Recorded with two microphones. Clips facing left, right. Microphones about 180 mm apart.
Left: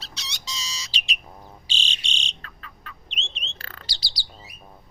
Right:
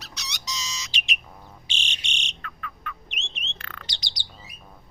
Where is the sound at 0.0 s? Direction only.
30° left (ahead or behind).